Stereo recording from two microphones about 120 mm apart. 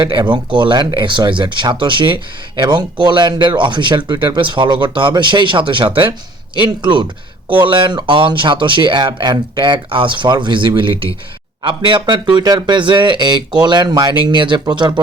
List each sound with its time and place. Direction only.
0.0 s speech: 40° right (ahead or behind)